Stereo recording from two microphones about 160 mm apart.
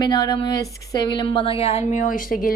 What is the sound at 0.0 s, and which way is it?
Speech, 25° left (ahead or behind).